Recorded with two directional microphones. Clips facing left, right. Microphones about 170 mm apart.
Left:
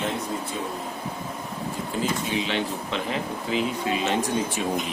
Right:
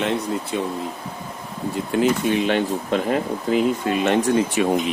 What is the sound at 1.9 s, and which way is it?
Speech, 60° right (ahead or behind).